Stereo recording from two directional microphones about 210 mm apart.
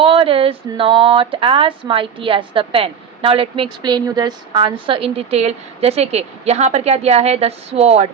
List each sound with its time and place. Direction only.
0.0 s speech: 25° right (ahead or behind)